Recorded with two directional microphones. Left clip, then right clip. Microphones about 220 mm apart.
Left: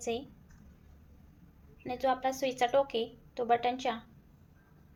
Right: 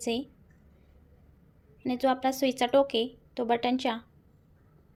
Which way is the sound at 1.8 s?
40° right (ahead or behind).